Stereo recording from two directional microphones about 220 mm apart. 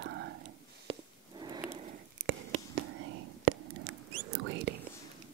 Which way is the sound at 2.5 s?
60° right (ahead or behind).